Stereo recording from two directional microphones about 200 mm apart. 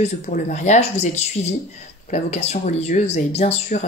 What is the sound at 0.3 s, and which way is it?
Speech, 40° left (ahead or behind).